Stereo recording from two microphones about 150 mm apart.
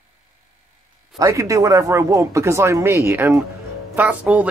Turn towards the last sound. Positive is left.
turn(degrees=-10)  # may be behind; listen again after turning